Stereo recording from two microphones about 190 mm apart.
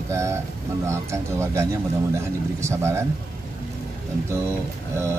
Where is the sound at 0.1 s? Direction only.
15° right (ahead or behind).